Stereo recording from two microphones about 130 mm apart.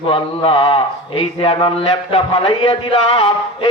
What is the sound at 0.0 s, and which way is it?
A man's voice, 45° left (ahead or behind).